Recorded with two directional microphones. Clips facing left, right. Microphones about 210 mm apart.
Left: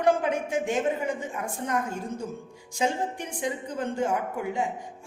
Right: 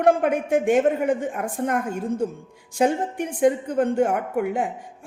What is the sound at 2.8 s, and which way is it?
Speech, 55° right (ahead or behind).